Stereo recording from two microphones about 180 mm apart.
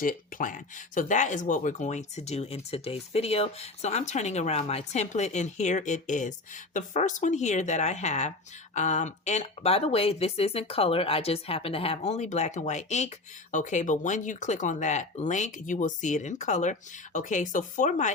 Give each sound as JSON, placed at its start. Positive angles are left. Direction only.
{"t": 0.0, "sound": "speech", "side_deg": 50}